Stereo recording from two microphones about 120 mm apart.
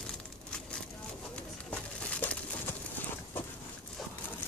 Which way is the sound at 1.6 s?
10° left (ahead or behind).